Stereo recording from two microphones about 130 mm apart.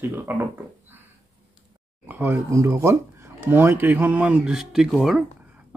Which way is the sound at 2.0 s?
15° right (ahead or behind).